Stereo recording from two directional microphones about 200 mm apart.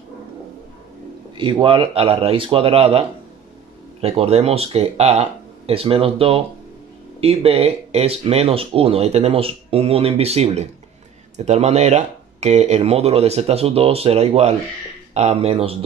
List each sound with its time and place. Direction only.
1.3 s speech: 25° right (ahead or behind)